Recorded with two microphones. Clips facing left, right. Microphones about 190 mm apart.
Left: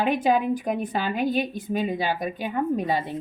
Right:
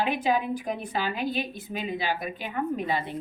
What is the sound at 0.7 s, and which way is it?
Speech, 45° left (ahead or behind).